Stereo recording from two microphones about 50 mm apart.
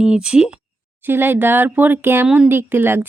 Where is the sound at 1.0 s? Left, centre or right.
Right.